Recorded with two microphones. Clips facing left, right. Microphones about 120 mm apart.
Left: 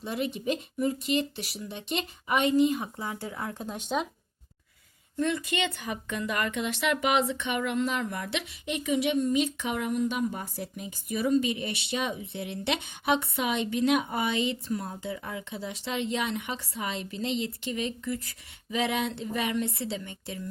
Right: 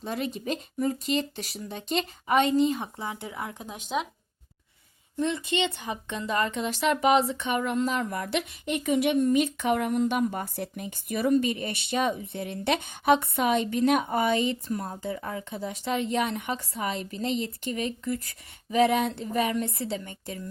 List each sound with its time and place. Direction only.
0.0 s speech: 40° right (ahead or behind)
3.0 s speech: 20° right (ahead or behind)
3.6 s speech: 5° right (ahead or behind)
5.1 s a woman's voice: 25° right (ahead or behind); by 20.4 s 45° right (ahead or behind)